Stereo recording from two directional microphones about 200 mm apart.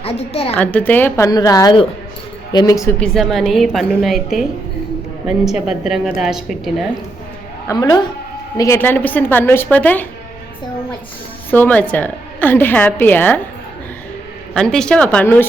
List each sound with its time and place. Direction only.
0.0 s a woman's voice: 30° left (ahead or behind)
0.5 s a woman's voice: 5° left (ahead or behind)
3.0 s a woman's voice: centre (ahead or behind)
5.6 s a woman's voice: centre (ahead or behind)
7.7 s a woman's voice: 15° left (ahead or behind)
11.5 s a woman's voice: 10° left (ahead or behind)
14.5 s a woman's voice: 5° left (ahead or behind)